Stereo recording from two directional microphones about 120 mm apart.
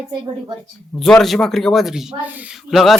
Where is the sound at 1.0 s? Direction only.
5° left (ahead or behind); by 2.5 s 15° right (ahead or behind).